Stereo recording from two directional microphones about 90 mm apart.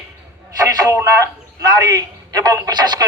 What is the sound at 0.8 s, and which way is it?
A man's voice, 45° right (ahead or behind).